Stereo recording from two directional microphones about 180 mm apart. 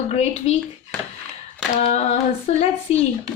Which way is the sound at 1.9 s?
35° left (ahead or behind).